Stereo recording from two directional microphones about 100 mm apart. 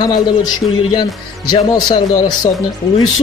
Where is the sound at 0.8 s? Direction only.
60° left (ahead or behind); by 2.4 s 45° left (ahead or behind).